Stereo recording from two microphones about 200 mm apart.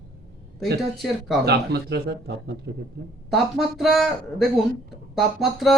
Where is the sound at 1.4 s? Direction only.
55° right (ahead or behind).